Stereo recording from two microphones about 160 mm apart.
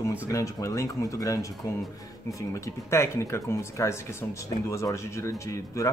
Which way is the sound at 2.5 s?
15° left (ahead or behind).